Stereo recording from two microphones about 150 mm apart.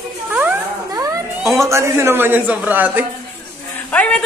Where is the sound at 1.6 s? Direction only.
20° right (ahead or behind).